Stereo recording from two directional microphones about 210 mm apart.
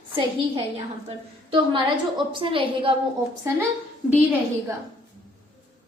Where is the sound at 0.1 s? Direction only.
25° right (ahead or behind).